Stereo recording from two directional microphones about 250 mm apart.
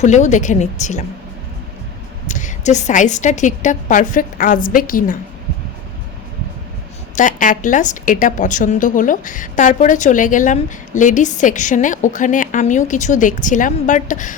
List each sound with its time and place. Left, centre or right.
0.0 s speech: left
2.2 s a woman's voice: left
7.2 s a woman's voice: left